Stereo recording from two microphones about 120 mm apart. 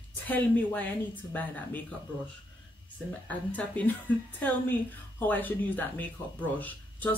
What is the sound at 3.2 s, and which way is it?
Speech, 15° left (ahead or behind).